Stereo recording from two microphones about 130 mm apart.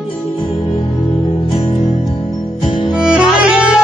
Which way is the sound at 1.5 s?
50° left (ahead or behind).